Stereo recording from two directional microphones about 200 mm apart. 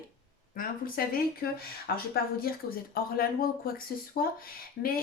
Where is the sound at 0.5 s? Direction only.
45° left (ahead or behind).